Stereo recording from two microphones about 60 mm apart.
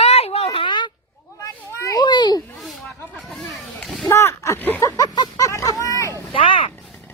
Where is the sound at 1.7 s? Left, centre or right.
Left.